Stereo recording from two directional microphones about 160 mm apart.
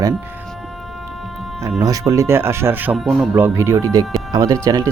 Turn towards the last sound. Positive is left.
turn(degrees=-25)  # may be behind; listen again after turning